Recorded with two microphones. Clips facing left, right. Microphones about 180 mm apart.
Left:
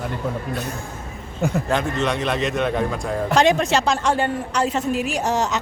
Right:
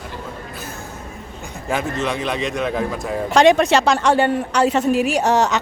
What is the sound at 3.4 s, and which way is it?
A woman's voice, 70° right (ahead or behind).